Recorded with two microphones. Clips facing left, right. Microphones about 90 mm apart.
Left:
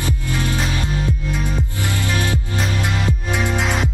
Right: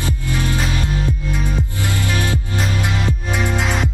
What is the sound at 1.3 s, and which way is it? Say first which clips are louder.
Music: right 1 dB; 5° right (ahead or behind).